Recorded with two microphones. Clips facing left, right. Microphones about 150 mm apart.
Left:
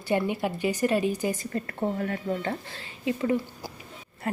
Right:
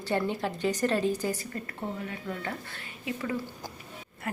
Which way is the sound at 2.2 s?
30° left (ahead or behind).